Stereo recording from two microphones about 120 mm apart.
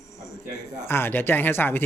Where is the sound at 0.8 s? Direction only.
20° left (ahead or behind).